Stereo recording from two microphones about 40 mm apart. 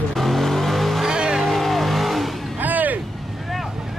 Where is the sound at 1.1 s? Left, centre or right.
Centre.